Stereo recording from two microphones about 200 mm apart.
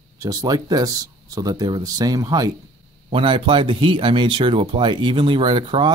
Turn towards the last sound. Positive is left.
turn(degrees=-25)  # may be behind; listen again after turning